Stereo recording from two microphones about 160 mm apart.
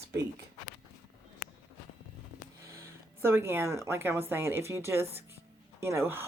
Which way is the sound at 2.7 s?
15° right (ahead or behind).